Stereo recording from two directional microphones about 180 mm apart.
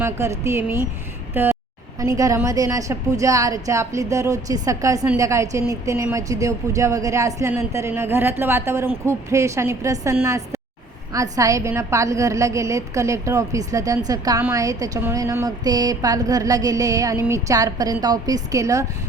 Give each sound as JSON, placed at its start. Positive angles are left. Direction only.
{"t": 0.0, "sound": "a woman's voice", "side_deg": -15}